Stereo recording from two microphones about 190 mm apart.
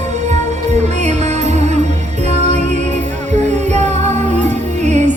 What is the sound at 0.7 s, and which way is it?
Music, 35° right (ahead or behind).